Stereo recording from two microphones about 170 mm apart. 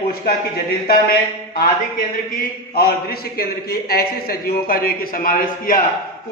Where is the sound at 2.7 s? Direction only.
65° left (ahead or behind).